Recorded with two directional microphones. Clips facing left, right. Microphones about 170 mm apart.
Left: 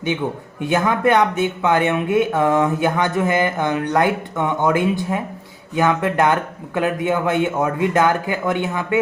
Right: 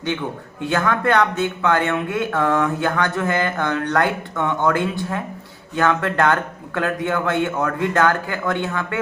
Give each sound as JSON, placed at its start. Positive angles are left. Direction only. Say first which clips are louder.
{"t": 0.7, "sound": "speech", "louder": "left 2 dB", "side_deg": 15}